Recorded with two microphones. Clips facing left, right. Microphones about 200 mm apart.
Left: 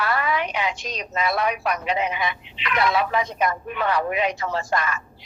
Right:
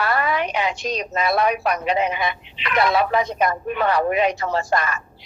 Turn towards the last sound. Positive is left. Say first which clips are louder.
# right 3 dB
turn(degrees=-40)  # may be behind; listen again after turning